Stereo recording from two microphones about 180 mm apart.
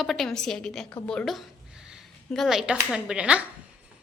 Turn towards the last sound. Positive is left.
turn(degrees=-5)  # may be behind; listen again after turning